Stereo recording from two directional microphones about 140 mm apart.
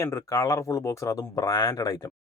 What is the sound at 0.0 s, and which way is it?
Speech, 20° left (ahead or behind).